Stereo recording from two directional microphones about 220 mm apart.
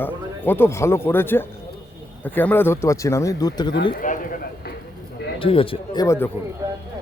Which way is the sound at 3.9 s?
40° left (ahead or behind).